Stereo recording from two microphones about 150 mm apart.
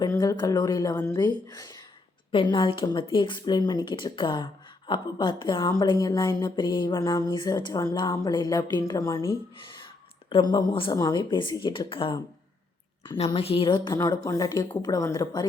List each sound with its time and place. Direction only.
0.0 s a woman's voice: 25° left (ahead or behind)